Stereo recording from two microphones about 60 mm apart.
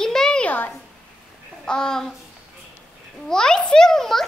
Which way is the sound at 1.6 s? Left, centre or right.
Centre.